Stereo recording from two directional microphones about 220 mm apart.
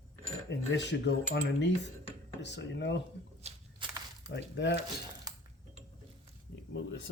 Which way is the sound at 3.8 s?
20° right (ahead or behind).